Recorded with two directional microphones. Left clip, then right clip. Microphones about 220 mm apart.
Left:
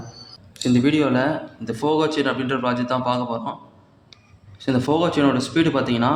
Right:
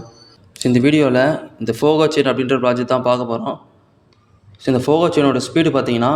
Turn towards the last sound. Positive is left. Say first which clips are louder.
# right 4 dB
turn(degrees=-30)  # may be behind; listen again after turning